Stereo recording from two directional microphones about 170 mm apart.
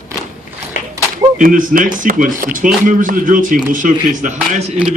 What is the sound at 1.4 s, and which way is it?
A man's voice, 50° right (ahead or behind).